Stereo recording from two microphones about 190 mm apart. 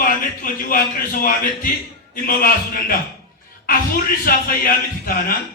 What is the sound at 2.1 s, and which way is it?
A man's voice, 50° left (ahead or behind).